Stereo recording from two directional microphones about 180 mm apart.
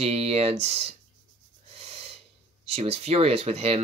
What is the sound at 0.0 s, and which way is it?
Speech, 35° right (ahead or behind).